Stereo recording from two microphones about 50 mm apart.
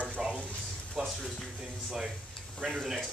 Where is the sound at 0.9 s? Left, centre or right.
Centre.